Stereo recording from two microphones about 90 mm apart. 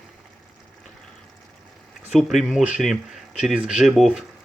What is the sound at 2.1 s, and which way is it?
Speech, centre (ahead or behind).